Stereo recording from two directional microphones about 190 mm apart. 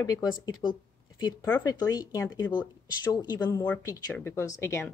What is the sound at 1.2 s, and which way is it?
A woman's voice, 15° left (ahead or behind).